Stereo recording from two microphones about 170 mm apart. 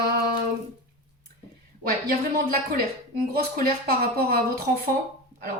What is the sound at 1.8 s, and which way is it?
Speech, 60° right (ahead or behind).